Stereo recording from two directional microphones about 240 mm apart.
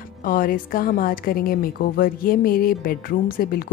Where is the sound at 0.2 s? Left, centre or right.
Left.